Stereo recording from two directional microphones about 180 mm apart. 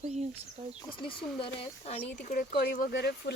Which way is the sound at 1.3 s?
30° left (ahead or behind).